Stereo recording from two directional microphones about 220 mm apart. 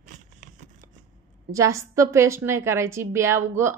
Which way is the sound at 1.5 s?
15° right (ahead or behind).